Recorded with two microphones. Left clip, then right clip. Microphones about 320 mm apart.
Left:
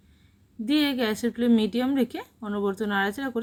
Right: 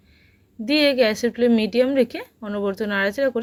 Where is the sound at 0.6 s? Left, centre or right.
Centre.